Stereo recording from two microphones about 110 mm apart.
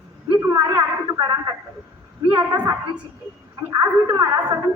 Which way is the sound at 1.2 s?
40° right (ahead or behind).